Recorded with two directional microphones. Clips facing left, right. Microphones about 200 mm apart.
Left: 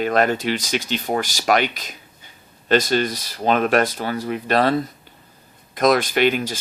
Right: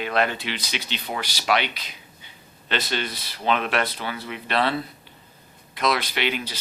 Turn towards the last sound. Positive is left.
turn(degrees=45)  # may be behind; listen again after turning